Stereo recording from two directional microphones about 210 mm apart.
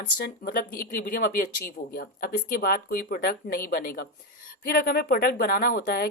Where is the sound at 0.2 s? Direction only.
45° left (ahead or behind).